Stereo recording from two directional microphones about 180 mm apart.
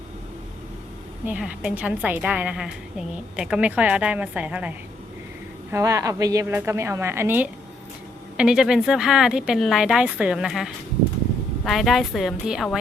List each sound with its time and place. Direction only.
1.2 s a woman's voice: 10° right (ahead or behind)
5.7 s a woman's voice: 20° right (ahead or behind); by 12.8 s 5° right (ahead or behind)